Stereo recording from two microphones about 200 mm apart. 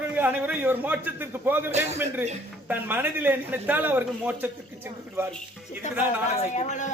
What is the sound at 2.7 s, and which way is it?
A man's voice, 10° right (ahead or behind).